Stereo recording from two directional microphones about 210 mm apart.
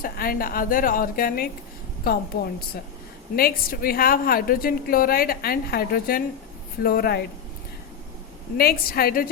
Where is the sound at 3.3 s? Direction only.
45° left (ahead or behind).